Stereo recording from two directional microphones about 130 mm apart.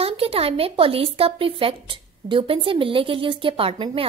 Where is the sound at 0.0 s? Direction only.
50° right (ahead or behind).